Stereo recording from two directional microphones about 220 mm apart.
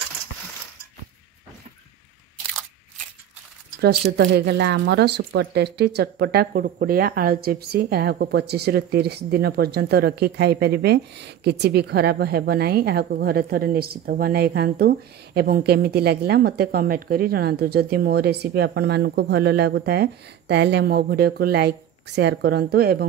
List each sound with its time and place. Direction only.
4.2 s speech: 50° right (ahead or behind)